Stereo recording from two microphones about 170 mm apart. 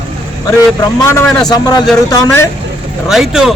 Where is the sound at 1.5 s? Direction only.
20° left (ahead or behind).